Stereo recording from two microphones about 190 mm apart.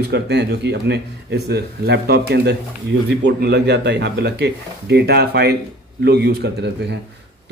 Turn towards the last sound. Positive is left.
turn(degrees=-55)  # may be behind; listen again after turning